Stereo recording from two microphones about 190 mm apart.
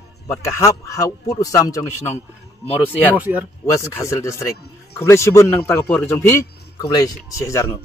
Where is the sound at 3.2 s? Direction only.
10° right (ahead or behind).